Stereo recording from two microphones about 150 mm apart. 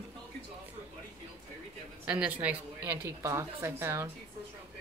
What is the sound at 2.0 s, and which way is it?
A woman's voice, 10° right (ahead or behind).